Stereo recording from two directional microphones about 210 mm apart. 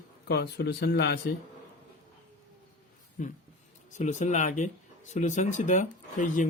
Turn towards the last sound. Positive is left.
turn(degrees=35)  # may be behind; listen again after turning